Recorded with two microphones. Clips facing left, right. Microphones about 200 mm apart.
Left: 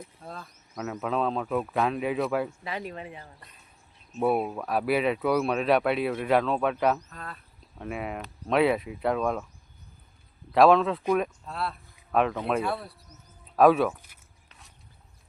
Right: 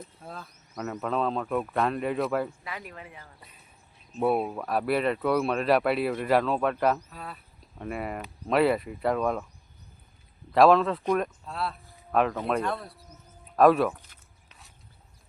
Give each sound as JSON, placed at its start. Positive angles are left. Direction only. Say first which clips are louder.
{"t": 0.2, "sound": "speech", "louder": "left 1 dB", "side_deg": 0}
{"t": 2.6, "sound": "speech", "louder": "left 5 dB", "side_deg": 25}
{"t": 4.2, "sound": "speech", "louder": "even", "side_deg": 0}
{"t": 10.5, "sound": "speech", "louder": "even", "side_deg": 0}
{"t": 13.6, "sound": "a sound", "louder": "even", "side_deg": 0}